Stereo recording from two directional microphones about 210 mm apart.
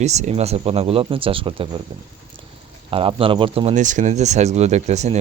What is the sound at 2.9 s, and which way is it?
Speech, 25° right (ahead or behind).